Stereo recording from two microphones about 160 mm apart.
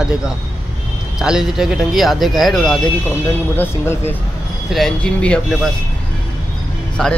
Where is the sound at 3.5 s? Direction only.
15° left (ahead or behind).